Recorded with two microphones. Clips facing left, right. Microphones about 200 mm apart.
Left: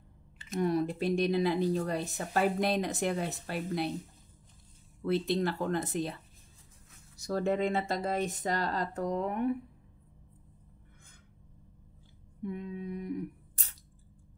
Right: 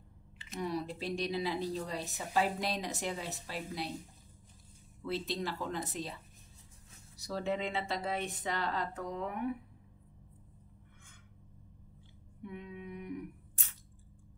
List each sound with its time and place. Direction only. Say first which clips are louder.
0.5 s speech: left 7 dB; 50° left (ahead or behind)
5.0 s speech: left 7 dB; 55° left (ahead or behind)
7.2 s speech: left 6 dB; 45° left (ahead or behind)
12.4 s speech: left 7 dB; 40° left (ahead or behind)